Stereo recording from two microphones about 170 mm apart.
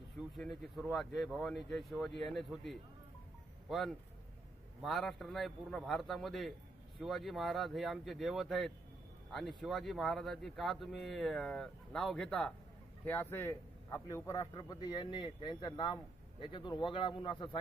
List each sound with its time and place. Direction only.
0.4 s a man's voice: centre (ahead or behind); by 17.6 s 30° left (ahead or behind)